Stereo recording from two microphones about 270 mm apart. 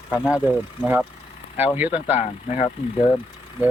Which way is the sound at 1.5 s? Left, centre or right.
Centre.